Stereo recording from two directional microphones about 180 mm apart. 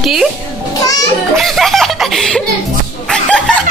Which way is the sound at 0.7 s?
20° left (ahead or behind).